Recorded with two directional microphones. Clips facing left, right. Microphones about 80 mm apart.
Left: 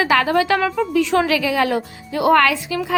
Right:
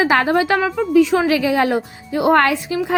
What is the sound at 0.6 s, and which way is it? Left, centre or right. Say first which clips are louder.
Speech: right 4 dB; centre.